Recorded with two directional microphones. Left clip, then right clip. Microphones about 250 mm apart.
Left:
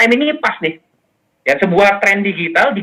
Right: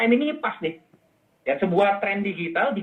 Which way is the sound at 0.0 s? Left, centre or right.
Left.